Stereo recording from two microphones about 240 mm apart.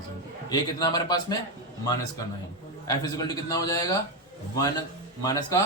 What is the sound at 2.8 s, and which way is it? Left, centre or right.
A man's voice, centre.